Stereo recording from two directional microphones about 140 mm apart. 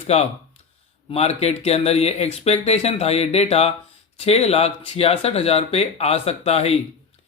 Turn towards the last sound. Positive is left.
turn(degrees=50)  # may be behind; listen again after turning